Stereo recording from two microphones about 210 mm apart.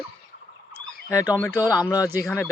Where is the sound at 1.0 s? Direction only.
15° left (ahead or behind).